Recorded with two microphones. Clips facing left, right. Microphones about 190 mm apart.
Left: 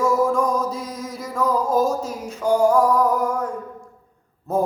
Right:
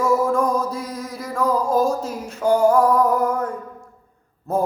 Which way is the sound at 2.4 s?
15° left (ahead or behind).